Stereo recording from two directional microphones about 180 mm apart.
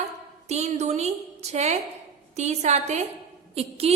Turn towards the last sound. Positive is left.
turn(degrees=-35)  # may be behind; listen again after turning